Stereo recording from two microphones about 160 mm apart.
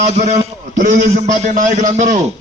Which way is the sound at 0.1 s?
45° right (ahead or behind).